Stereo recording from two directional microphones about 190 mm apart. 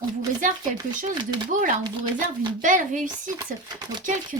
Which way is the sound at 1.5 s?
45° right (ahead or behind).